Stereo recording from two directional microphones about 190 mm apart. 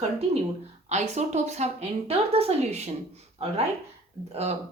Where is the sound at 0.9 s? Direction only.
35° right (ahead or behind).